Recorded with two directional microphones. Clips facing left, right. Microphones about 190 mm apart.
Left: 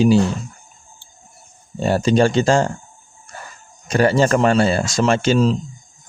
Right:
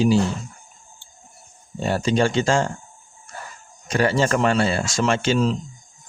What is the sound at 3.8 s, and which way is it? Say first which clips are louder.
Speech: left 4 dB; 40° left (ahead or behind).